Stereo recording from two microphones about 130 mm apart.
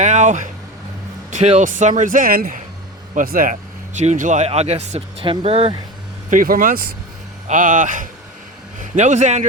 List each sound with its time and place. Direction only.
0.0 s speech: 70° right (ahead or behind)
5.2 s speech: 45° right (ahead or behind)
6.3 s speech: 90° right
8.8 s speech: 65° right (ahead or behind)